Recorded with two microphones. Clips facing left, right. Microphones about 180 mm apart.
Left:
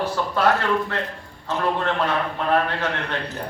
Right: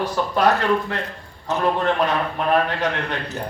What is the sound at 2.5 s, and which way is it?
Speech, 15° right (ahead or behind).